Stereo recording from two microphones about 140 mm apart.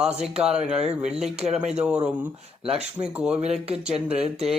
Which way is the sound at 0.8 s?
50° right (ahead or behind).